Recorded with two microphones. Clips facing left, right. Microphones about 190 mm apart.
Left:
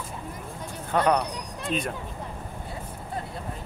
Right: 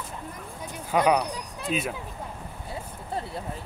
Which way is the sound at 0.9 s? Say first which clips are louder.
Right 1 dB; 10° right (ahead or behind).